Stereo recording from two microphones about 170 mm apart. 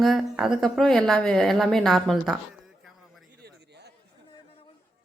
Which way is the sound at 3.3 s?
75° right (ahead or behind).